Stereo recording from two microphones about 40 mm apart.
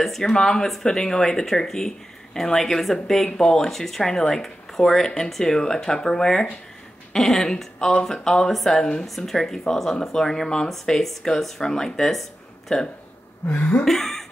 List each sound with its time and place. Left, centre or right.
0.2 s speech: centre
12.0 s a sound: centre
13.5 s speech: left
13.8 s beatboxing: centre